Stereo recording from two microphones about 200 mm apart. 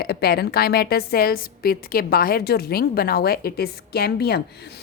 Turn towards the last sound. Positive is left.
turn(degrees=55)  # may be behind; listen again after turning